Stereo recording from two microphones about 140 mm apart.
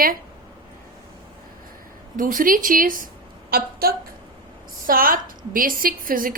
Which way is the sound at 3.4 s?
90° right.